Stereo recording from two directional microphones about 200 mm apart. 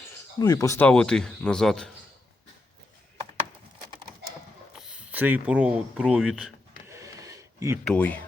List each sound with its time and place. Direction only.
0.3 s speech: 20° left (ahead or behind); by 1.9 s 5° left (ahead or behind)
4.8 s speech: 5° right (ahead or behind)
6.8 s a sound: 15° right (ahead or behind)
7.9 s speech: 5° left (ahead or behind)